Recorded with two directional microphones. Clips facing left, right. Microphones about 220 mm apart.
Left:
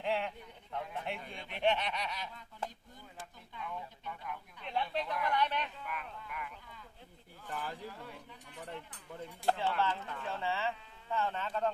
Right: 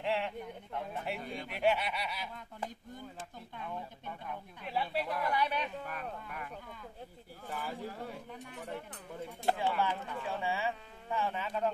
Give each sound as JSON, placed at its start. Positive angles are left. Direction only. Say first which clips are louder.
{"t": 0.0, "sound": "speech", "louder": "right 1 dB", "side_deg": 0}
{"t": 4.6, "sound": "speech", "louder": "right 1 dB", "side_deg": -5}
{"t": 5.8, "sound": "speech", "louder": "right 3 dB", "side_deg": -40}
{"t": 7.5, "sound": "speech", "louder": "right 1 dB", "side_deg": -5}
{"t": 7.8, "sound": "speech", "louder": "right 5 dB", "side_deg": -45}
{"t": 9.5, "sound": "speech", "louder": "right 1 dB", "side_deg": -15}